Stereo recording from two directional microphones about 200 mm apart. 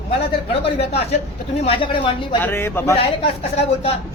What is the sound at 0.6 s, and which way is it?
Speech, 30° left (ahead or behind).